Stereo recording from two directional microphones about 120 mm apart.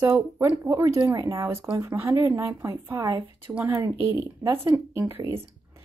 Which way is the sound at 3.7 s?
25° right (ahead or behind).